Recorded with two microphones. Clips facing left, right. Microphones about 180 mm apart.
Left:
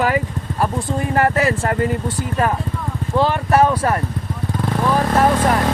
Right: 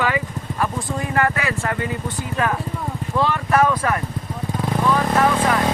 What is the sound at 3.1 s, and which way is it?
Speech, 30° left (ahead or behind).